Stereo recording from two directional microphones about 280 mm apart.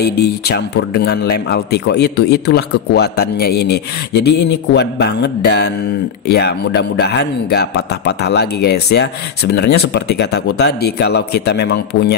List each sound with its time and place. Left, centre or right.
0.0 s speech: left